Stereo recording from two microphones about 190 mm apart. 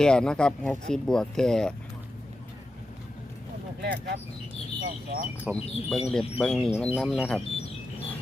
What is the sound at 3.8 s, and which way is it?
Speech, 60° right (ahead or behind).